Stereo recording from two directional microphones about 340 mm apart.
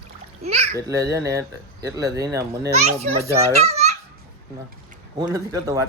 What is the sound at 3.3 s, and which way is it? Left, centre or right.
Speech, centre.